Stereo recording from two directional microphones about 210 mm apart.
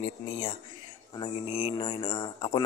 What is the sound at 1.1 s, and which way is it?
Speech, 20° left (ahead or behind).